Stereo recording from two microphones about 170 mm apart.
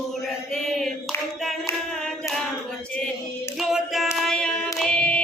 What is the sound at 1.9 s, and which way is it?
Hands, centre (ahead or behind).